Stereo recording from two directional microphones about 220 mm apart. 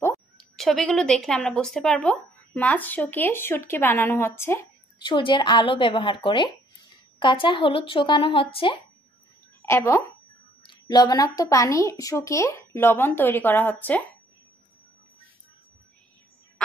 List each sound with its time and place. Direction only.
0.6 s speech: centre (ahead or behind)
5.0 s speech: 20° left (ahead or behind)
9.6 s speech: 10° left (ahead or behind)